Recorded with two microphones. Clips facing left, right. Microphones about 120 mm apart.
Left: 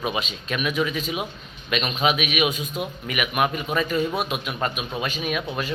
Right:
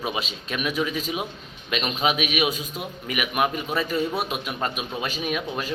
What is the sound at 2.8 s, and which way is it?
Speech, 15° left (ahead or behind).